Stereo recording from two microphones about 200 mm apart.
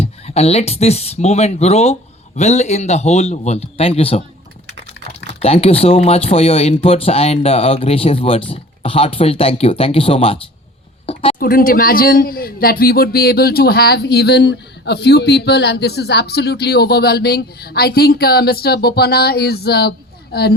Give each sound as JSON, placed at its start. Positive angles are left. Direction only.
{"t": 0.0, "sound": "speech", "side_deg": 30}
{"t": 5.4, "sound": "speech", "side_deg": 30}
{"t": 11.0, "sound": "a sound", "side_deg": 30}
{"t": 11.3, "sound": "speech", "side_deg": 50}